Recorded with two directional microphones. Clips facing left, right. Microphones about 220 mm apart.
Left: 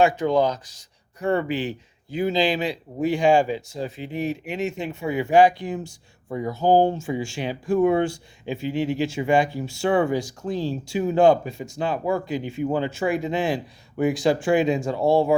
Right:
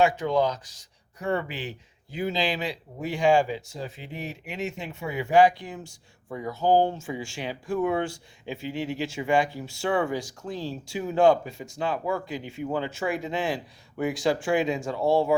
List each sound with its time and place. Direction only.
0.0 s speech: 30° left (ahead or behind)